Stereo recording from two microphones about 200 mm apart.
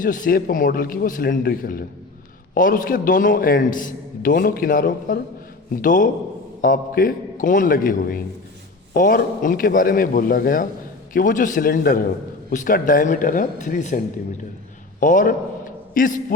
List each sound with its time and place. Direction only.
0.0 s a man's voice: 45° left (ahead or behind)
15.0 s a man's voice: 40° left (ahead or behind)